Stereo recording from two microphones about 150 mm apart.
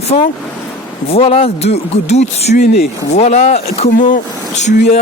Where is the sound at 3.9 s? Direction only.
60° left (ahead or behind).